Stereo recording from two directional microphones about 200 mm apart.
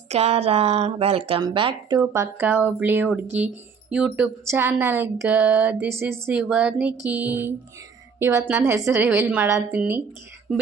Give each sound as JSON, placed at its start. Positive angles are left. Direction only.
{"t": 0.1, "sound": "speech", "side_deg": -30}